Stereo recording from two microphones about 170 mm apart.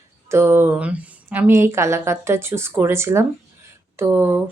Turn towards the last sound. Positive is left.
turn(degrees=-15)  # may be behind; listen again after turning